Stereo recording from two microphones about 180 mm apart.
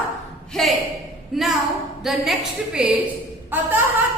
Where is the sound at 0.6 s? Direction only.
5° left (ahead or behind).